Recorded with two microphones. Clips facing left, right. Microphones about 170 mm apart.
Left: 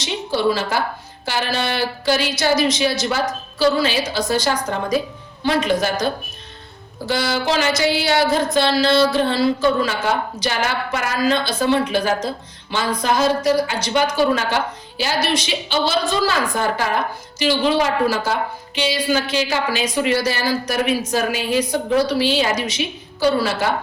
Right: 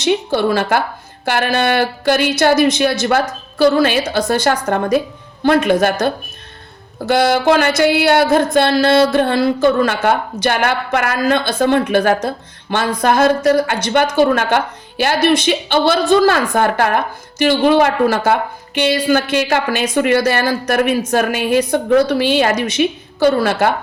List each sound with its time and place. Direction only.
0.0 s speech: 55° right (ahead or behind)
7.1 s speech: 55° right (ahead or behind)